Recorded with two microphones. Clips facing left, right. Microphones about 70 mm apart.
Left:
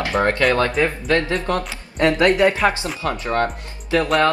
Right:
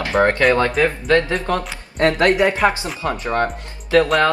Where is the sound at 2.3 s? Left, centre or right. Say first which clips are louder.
Even; right.